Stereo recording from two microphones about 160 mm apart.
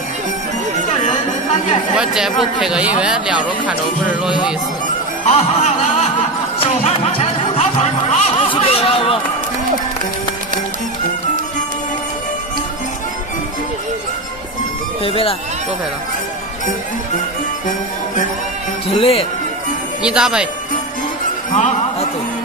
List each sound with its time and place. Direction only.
1.0 s music: 35° left (ahead or behind)
2.0 s speech: 5° right (ahead or behind)
5.2 s music: 40° left (ahead or behind)
15.0 s speech: 35° left (ahead or behind)
18.9 s speech: 40° left (ahead or behind)
20.0 s speech: 5° right (ahead or behind)
21.5 s speech: 50° left (ahead or behind)